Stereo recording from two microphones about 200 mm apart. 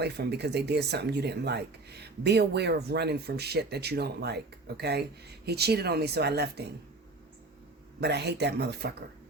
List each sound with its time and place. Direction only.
0.0 s speech: 55° right (ahead or behind)
8.0 s speech: 55° right (ahead or behind)